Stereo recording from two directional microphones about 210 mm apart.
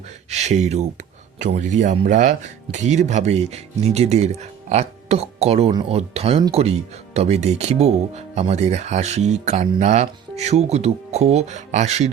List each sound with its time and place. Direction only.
0.3 s speech: 30° right (ahead or behind)